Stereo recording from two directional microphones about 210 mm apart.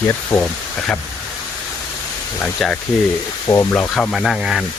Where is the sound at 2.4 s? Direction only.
5° left (ahead or behind).